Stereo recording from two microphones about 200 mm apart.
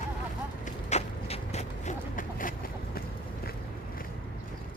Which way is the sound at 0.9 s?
30° left (ahead or behind).